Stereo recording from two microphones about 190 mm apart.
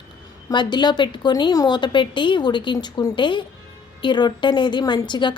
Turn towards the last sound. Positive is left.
turn(degrees=25)  # may be behind; listen again after turning